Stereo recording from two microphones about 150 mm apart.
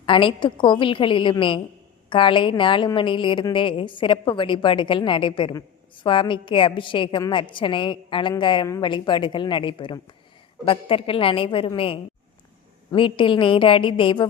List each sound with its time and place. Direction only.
0.0 s a woman's voice: 35° left (ahead or behind)